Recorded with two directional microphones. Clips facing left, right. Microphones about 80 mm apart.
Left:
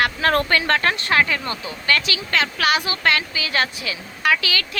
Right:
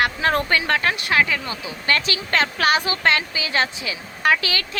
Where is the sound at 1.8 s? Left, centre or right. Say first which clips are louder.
Even; right.